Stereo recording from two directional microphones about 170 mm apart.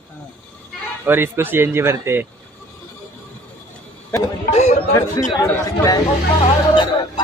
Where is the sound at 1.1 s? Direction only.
15° right (ahead or behind).